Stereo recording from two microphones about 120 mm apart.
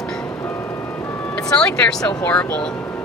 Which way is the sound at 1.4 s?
5° left (ahead or behind).